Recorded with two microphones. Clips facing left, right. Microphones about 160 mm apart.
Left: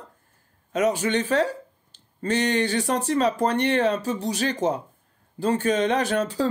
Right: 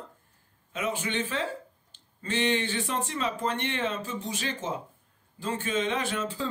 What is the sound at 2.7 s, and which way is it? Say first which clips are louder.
Speech: left 7 dB; 40° left (ahead or behind).